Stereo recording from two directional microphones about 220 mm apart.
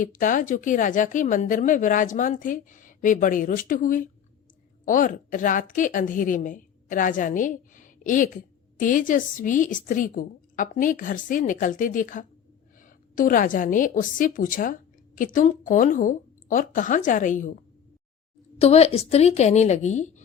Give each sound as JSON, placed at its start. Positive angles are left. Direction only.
{"t": 0.0, "sound": "a woman's voice", "side_deg": 35}
{"t": 18.6, "sound": "a woman's voice", "side_deg": 30}